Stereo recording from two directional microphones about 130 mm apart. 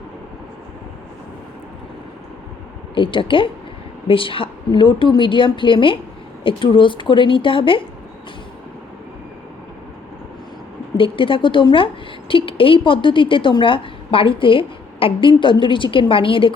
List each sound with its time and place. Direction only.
2.9 s a woman's voice: 40° left (ahead or behind)
10.9 s a woman's voice: 40° left (ahead or behind)